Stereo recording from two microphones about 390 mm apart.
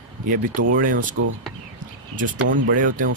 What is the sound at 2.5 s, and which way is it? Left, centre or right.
Speech, right.